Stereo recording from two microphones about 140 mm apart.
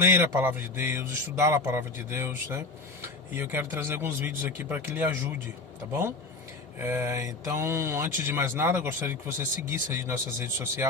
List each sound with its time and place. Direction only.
0.0 s speech: 15° right (ahead or behind)
6.7 s speech: 20° right (ahead or behind)